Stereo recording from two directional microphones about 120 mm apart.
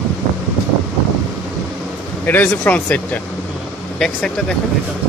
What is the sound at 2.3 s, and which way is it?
Speech, 15° left (ahead or behind).